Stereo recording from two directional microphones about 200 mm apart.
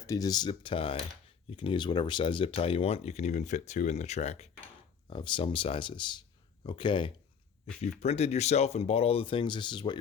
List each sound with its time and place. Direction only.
0.0 s speech: 15° left (ahead or behind)